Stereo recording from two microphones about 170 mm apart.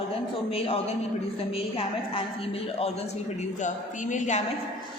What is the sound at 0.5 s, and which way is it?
Speech, 35° left (ahead or behind).